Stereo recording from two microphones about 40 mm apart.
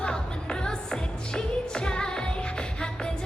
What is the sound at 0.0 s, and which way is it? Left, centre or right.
Music, left.